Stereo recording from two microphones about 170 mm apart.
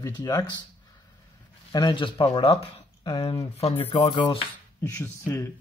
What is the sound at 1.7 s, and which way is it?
Speech, 20° left (ahead or behind).